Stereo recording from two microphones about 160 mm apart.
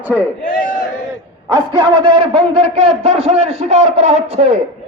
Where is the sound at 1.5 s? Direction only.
30° right (ahead or behind).